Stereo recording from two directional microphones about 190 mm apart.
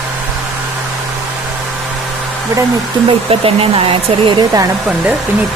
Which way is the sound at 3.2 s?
30° right (ahead or behind).